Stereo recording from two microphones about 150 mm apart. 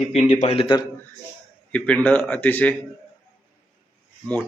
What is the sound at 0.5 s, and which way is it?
Speech, 40° left (ahead or behind).